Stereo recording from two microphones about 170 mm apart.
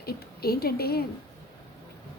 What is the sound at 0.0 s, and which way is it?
A woman's voice, 65° left (ahead or behind).